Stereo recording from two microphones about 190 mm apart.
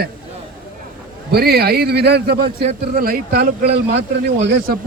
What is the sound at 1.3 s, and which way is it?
A man's voice, 55° right (ahead or behind).